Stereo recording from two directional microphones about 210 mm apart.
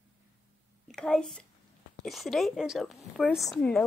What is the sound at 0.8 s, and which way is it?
A woman's voice, 5° left (ahead or behind).